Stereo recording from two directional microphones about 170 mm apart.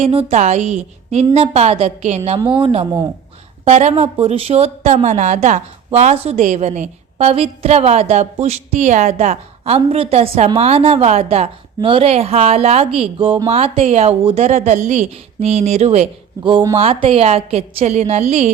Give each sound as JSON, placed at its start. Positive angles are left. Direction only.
{"t": 0.0, "sound": "a woman's voice", "side_deg": -35}
{"t": 3.6, "sound": "a woman's voice", "side_deg": -40}
{"t": 16.4, "sound": "a woman's voice", "side_deg": -30}